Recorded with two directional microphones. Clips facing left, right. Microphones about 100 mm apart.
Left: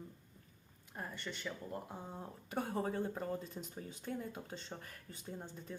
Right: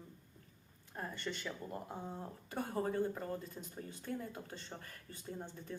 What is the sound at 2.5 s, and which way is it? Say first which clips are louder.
Speech: even; 25° left (ahead or behind).